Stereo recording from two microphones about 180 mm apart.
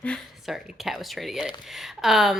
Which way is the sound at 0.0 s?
Centre (ahead or behind).